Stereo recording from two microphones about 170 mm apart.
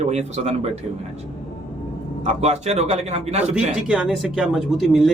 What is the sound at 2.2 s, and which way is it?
Speech, 40° right (ahead or behind).